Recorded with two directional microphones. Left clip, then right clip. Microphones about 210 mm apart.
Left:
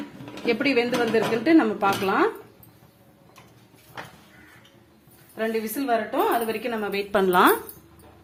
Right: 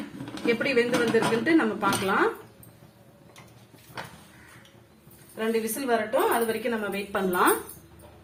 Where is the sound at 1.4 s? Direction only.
35° left (ahead or behind).